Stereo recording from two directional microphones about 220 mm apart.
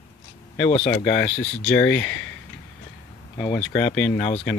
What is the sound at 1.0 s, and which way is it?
Speech, 5° left (ahead or behind).